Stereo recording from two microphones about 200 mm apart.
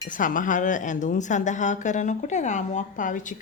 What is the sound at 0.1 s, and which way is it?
A woman's voice, 40° left (ahead or behind).